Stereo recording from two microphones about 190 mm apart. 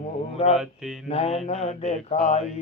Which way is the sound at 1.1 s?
30° left (ahead or behind).